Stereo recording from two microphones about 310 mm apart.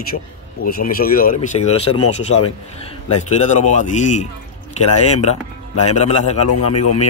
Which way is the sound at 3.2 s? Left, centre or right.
Left.